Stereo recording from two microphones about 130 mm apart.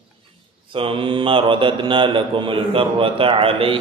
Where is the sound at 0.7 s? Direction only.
45° right (ahead or behind).